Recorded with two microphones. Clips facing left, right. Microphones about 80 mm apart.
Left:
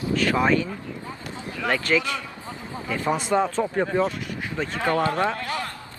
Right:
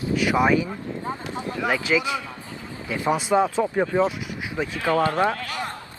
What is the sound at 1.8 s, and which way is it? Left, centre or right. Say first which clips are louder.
Speech: right 1 dB; centre.